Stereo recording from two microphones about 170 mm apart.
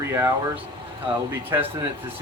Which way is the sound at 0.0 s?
15° right (ahead or behind).